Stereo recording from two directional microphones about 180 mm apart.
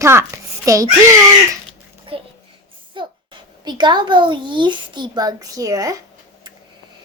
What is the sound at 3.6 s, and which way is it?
A child's voice, 25° right (ahead or behind).